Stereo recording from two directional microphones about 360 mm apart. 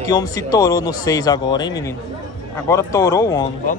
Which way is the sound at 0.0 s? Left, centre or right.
Centre.